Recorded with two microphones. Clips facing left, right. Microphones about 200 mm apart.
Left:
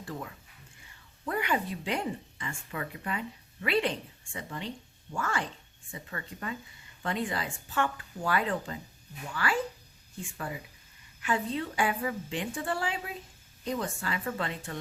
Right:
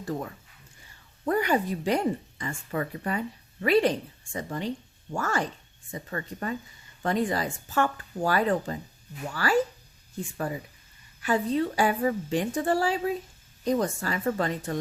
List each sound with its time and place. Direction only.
0.0 s a woman's voice: 40° right (ahead or behind)